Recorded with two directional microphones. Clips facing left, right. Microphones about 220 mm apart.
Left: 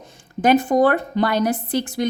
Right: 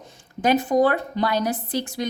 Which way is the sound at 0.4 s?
50° left (ahead or behind).